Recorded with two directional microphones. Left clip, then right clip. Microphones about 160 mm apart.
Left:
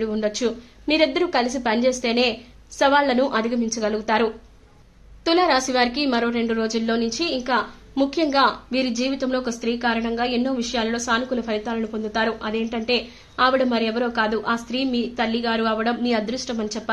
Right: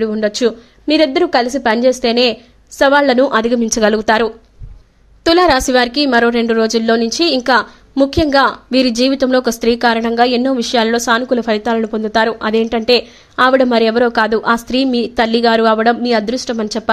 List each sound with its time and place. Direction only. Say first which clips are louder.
0.0 s a woman's voice: right 8 dB; 40° right (ahead or behind)